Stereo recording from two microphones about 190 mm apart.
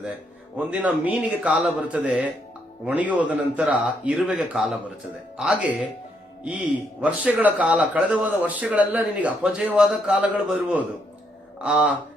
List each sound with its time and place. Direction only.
0.5 s speech: 5° right (ahead or behind)
7.0 s speech: 10° right (ahead or behind)